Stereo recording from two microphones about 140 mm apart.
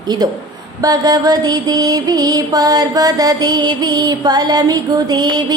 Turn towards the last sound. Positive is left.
turn(degrees=-30)  # may be behind; listen again after turning